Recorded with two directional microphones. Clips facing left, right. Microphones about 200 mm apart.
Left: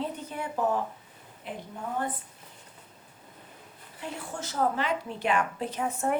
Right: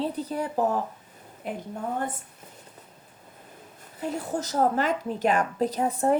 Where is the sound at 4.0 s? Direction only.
40° right (ahead or behind).